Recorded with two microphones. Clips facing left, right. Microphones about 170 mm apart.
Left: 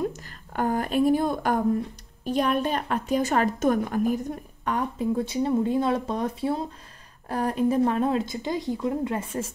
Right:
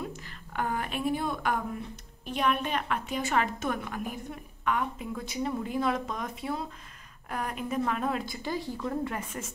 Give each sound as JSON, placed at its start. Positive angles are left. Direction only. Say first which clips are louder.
{"t": 0.0, "sound": "a woman's voice", "louder": "left 9 dB", "side_deg": 45}